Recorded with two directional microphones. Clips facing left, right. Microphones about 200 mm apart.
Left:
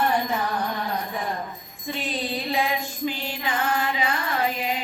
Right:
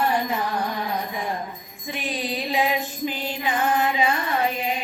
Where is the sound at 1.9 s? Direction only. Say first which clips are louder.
Even; 15° right (ahead or behind).